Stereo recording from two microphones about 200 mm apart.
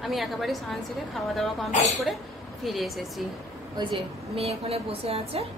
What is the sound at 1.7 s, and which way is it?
Speech, 35° left (ahead or behind).